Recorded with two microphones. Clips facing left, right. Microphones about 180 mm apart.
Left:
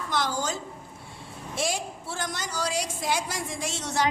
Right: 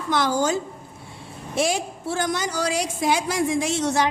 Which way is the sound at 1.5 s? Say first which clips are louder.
Right 7 dB; 70° right (ahead or behind).